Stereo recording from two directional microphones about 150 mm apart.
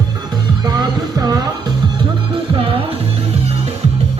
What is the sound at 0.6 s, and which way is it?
Music, 25° right (ahead or behind).